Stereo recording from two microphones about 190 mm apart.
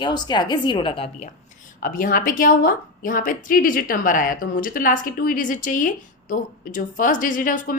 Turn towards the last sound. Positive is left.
turn(degrees=45)  # may be behind; listen again after turning